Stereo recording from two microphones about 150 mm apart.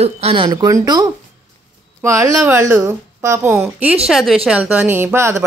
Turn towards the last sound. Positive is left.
turn(degrees=-15)  # may be behind; listen again after turning